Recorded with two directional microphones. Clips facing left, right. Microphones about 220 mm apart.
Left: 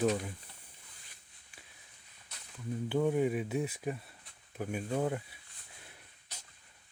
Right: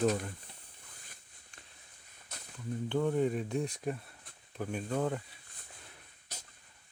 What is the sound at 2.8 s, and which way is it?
Speech, 10° left (ahead or behind).